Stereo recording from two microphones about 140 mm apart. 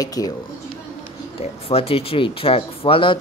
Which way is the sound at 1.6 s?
45° left (ahead or behind).